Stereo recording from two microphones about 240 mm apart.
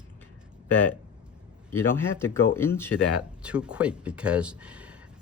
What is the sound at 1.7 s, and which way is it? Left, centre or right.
Speech, centre.